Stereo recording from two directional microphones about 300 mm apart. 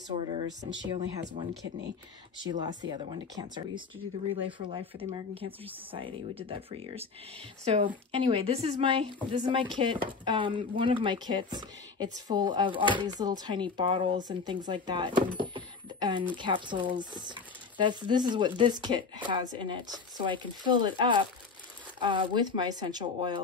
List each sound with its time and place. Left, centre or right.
0.8 s a woman's voice: centre
2.5 s a woman's voice: right